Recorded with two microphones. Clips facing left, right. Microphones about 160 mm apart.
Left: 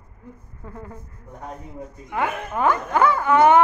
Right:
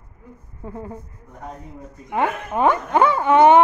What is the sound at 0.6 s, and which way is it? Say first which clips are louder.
Speech: right 5 dB; 20° right (ahead or behind).